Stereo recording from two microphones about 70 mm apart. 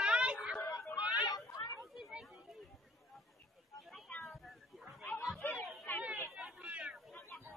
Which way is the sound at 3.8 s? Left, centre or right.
Centre.